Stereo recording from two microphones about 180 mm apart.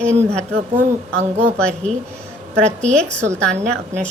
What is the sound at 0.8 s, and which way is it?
Speech, 40° right (ahead or behind).